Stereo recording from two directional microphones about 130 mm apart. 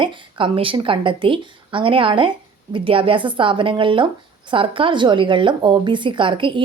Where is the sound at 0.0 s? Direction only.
40° right (ahead or behind).